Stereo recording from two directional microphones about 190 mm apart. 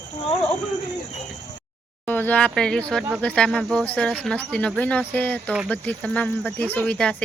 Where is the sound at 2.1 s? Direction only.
10° left (ahead or behind).